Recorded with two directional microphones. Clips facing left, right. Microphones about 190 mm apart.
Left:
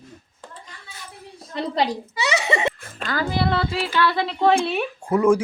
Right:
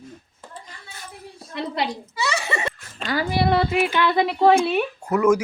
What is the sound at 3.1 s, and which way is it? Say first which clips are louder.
Speech: right 2 dB; 20° right (ahead or behind).